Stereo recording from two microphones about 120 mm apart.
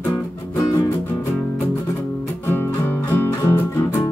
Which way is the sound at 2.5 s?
15° left (ahead or behind).